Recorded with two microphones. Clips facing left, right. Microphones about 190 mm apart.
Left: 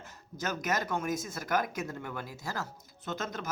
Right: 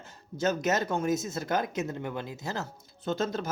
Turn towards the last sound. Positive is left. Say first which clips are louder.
# right 7 dB
turn(degrees=-30)  # may be behind; listen again after turning